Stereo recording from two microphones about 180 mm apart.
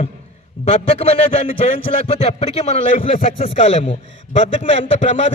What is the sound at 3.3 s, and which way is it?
Speech, 30° left (ahead or behind).